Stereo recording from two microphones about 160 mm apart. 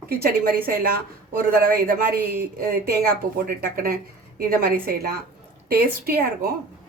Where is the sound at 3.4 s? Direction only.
65° right (ahead or behind).